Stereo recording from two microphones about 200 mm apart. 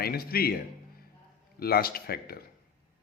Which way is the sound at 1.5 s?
50° left (ahead or behind).